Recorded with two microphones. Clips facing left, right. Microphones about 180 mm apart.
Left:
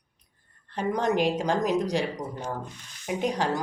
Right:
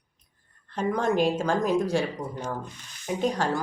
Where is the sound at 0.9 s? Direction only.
15° left (ahead or behind).